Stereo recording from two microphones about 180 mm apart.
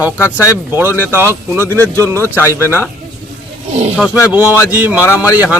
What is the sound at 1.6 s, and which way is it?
Speech, 10° left (ahead or behind).